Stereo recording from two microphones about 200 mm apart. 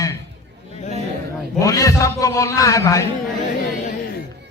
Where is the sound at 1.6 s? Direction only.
15° left (ahead or behind).